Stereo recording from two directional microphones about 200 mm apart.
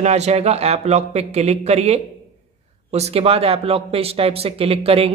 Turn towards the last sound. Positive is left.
turn(degrees=-30)  # may be behind; listen again after turning